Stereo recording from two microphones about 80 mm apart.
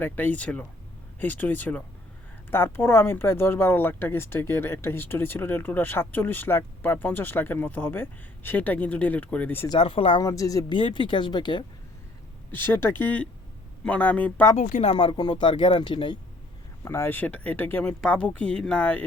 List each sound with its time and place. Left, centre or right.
0.0 s speech: left
9.6 s speech: left
10.2 s speech: left
10.7 s speech: left
12.5 s speech: left
14.9 s speech: left
16.8 s speech: left
17.2 s speech: centre
18.0 s speech: centre